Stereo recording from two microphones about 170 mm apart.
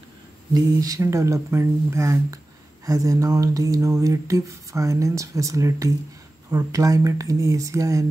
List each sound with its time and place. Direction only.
0.7 s speech: 20° right (ahead or behind)